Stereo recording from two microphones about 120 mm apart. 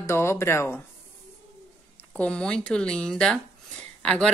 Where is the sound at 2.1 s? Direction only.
10° left (ahead or behind).